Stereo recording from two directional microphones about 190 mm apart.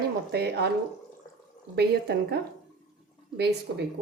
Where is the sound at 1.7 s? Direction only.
60° right (ahead or behind).